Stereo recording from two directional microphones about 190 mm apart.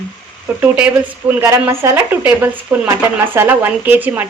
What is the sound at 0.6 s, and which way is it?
Speech, 5° right (ahead or behind).